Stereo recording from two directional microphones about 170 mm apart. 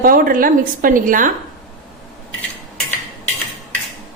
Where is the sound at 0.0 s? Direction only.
55° right (ahead or behind).